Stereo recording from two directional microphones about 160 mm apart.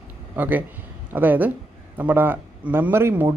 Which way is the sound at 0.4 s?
10° right (ahead or behind).